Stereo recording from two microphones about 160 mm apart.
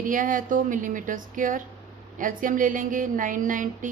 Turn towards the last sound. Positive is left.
turn(degrees=-55)  # may be behind; listen again after turning